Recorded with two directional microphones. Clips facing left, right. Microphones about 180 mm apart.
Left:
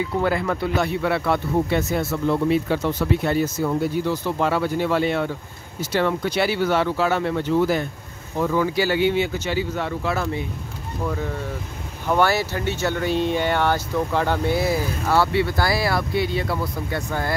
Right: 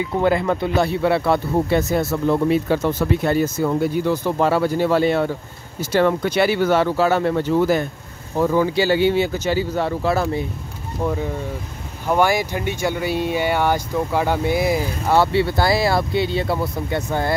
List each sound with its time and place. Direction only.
0.2 s speech: 25° right (ahead or behind); by 7.8 s 45° right (ahead or behind)
8.4 s speech: 30° right (ahead or behind)
12.1 s speech: 15° right (ahead or behind)